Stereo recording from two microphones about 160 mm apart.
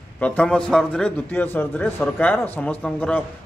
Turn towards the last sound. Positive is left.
turn(degrees=10)  # may be behind; listen again after turning